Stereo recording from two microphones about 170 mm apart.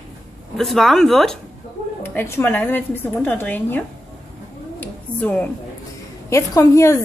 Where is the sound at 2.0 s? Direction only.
15° left (ahead or behind).